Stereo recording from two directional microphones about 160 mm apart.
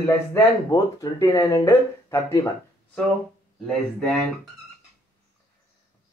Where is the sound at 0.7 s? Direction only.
25° left (ahead or behind).